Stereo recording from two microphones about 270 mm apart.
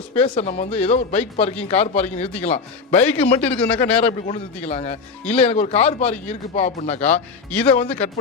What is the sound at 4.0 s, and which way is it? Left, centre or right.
Speech, left.